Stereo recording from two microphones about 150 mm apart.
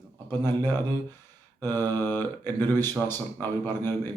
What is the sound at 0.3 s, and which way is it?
Speech, 15° left (ahead or behind).